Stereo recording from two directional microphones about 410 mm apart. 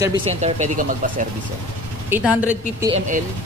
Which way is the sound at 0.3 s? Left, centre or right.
Centre.